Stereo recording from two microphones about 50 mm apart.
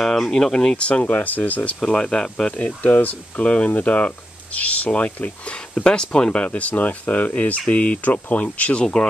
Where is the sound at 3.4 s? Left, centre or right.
Left.